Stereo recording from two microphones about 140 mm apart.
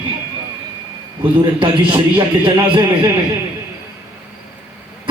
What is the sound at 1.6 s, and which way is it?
Speech, 35° right (ahead or behind).